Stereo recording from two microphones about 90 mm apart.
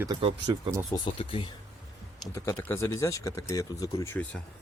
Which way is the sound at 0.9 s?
65° left (ahead or behind).